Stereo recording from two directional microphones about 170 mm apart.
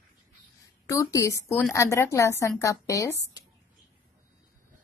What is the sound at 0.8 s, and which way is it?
A woman's voice, 20° left (ahead or behind).